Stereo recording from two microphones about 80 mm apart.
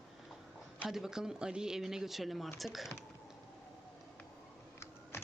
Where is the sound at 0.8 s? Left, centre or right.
Centre.